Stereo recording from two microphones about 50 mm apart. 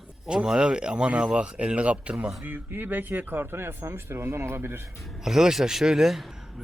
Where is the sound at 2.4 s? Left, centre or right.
Right.